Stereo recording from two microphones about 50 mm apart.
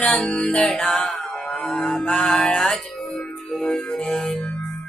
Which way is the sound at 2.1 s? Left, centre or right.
Left.